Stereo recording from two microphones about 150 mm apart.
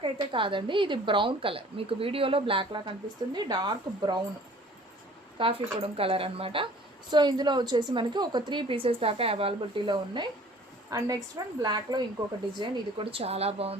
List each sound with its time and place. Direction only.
0.0 s a woman's voice: 35° right (ahead or behind)
5.4 s a woman's voice: 35° right (ahead or behind)